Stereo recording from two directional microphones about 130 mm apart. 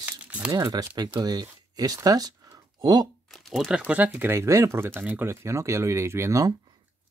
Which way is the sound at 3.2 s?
Centre (ahead or behind).